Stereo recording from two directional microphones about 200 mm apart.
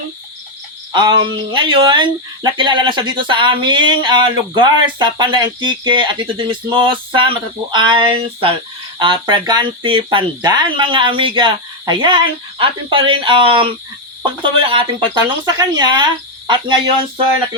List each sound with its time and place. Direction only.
0.9 s speech: 25° right (ahead or behind)